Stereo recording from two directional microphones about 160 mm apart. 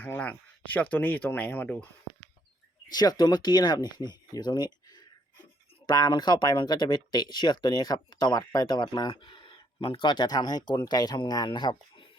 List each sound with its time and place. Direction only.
0.0 s a sound: 10° left (ahead or behind)
0.7 s speech: 10° left (ahead or behind)
2.9 s speech: 25° left (ahead or behind)